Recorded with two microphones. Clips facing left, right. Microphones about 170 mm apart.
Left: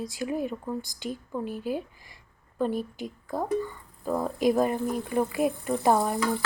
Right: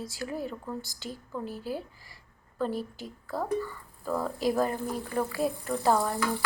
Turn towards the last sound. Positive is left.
turn(degrees=20)  # may be behind; listen again after turning